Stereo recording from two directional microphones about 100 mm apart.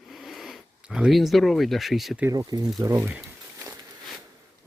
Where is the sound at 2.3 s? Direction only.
40° right (ahead or behind).